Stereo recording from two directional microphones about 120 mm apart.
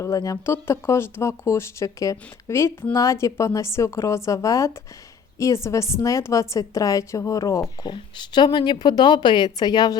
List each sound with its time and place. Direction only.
0.0 s speech: 30° left (ahead or behind)
7.8 s speech: 40° left (ahead or behind)